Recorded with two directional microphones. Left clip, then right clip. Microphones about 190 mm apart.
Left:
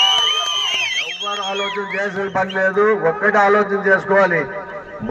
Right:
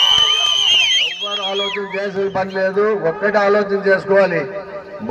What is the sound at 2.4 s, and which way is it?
A man's voice, 30° right (ahead or behind).